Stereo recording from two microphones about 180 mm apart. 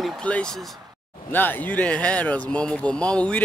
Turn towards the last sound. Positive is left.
turn(degrees=5)  # may be behind; listen again after turning